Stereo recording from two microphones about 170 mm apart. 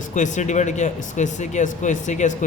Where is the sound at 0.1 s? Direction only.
45° left (ahead or behind).